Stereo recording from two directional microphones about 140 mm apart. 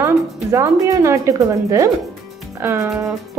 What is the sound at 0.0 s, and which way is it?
A woman's voice, 20° right (ahead or behind).